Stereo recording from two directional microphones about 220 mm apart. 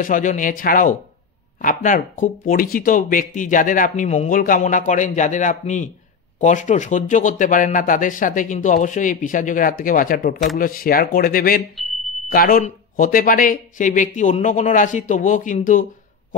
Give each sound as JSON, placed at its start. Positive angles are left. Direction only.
{"t": 0.0, "sound": "speech", "side_deg": 35}